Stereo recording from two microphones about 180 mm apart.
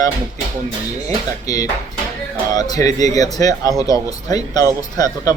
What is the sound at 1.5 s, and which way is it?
A man's voice, 20° left (ahead or behind).